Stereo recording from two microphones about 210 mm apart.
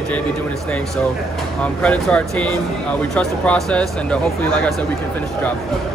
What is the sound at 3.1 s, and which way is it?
Speech, 5° left (ahead or behind).